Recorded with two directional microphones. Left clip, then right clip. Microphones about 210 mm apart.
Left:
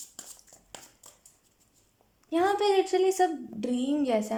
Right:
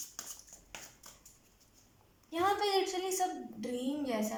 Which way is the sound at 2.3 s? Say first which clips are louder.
Left 6 dB; 45° left (ahead or behind).